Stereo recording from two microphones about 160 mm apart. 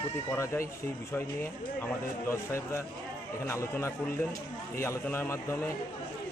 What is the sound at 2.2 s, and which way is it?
A man's voice, 15° left (ahead or behind).